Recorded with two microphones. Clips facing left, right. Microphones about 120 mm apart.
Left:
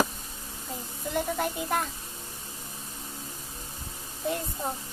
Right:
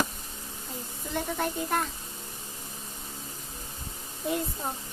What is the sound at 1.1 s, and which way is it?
Speech, 5° left (ahead or behind).